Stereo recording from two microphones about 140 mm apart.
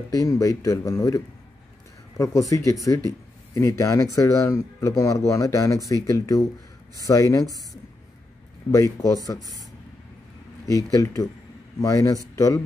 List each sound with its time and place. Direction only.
0.2 s speech: 25° left (ahead or behind)
8.7 s speech: 25° left (ahead or behind)
11.0 s speech: 20° left (ahead or behind)